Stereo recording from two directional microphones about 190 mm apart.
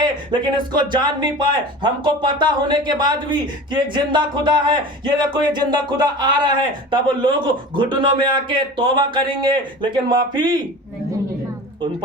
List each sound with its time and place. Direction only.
0.0 s speech: 25° right (ahead or behind)